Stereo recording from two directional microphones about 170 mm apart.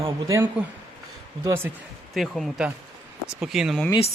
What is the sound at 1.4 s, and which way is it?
Speech, 15° right (ahead or behind).